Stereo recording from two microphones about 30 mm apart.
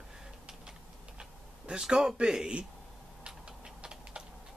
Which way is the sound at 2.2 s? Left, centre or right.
Right.